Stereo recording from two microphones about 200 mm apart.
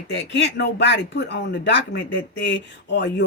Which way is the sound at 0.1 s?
60° left (ahead or behind).